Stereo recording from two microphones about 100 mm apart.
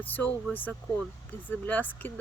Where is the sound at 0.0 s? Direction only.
15° left (ahead or behind).